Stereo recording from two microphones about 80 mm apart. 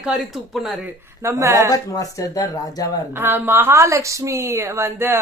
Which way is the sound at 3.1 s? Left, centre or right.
Right.